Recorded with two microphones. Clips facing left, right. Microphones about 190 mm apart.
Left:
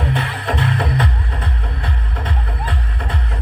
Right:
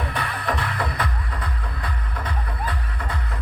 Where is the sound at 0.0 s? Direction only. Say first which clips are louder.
Left 5 dB; 25° left (ahead or behind).